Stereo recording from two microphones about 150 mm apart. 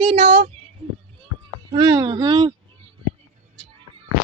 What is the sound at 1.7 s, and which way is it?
Speech, 25° right (ahead or behind).